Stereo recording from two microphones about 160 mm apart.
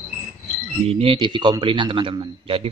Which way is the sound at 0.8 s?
35° right (ahead or behind).